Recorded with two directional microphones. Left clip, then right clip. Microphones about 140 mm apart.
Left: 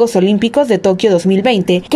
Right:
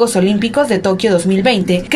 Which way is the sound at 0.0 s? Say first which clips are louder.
Left 2 dB; 50° left (ahead or behind).